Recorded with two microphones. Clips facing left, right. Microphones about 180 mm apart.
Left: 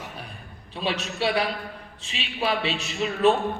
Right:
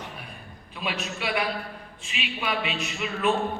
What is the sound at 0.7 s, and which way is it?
A man's voice, 30° left (ahead or behind).